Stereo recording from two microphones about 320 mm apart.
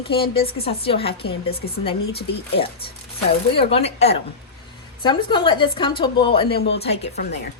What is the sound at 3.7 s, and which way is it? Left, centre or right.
A woman's voice, centre.